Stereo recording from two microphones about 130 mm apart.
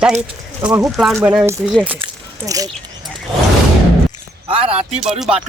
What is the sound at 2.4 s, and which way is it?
Speech, 25° right (ahead or behind).